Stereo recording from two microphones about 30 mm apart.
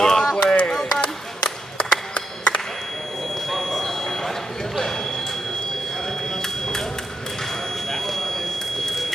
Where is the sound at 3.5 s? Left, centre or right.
Centre.